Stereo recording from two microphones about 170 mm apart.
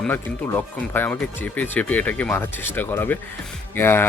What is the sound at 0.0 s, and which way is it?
Speech, 10° left (ahead or behind).